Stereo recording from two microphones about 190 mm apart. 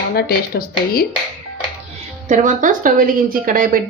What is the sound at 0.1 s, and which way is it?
Speech, 55° left (ahead or behind).